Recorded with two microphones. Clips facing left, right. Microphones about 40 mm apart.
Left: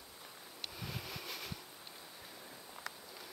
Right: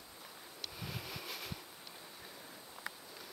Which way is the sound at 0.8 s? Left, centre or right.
Centre.